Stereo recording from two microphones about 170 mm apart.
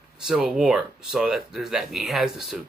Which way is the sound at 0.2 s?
Centre (ahead or behind).